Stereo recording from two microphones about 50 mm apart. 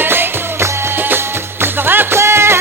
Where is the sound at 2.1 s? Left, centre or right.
Right.